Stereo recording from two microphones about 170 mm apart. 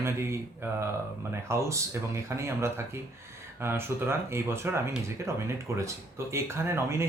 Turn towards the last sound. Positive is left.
turn(degrees=-15)  # may be behind; listen again after turning